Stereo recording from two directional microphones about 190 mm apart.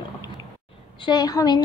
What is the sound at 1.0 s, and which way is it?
Speech, 20° left (ahead or behind).